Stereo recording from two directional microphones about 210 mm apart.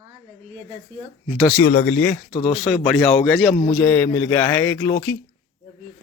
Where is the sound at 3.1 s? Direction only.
5° left (ahead or behind).